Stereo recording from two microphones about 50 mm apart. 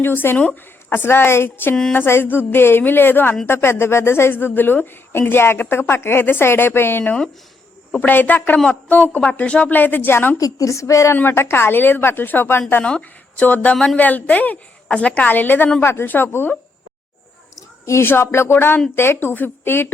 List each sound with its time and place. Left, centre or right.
0.0 s speech: left
1.5 s speech: left
5.3 s speech: left
5.5 s speech: left
7.9 s a woman's voice: left
8.5 s a woman's voice: centre
8.9 s a woman's voice: left
10.3 s a woman's voice: left
11.3 s speech: left
13.0 s a woman's voice: left
15.8 s speech: left
16.0 s speech: left
17.5 s a sound: left
18.0 s speech: left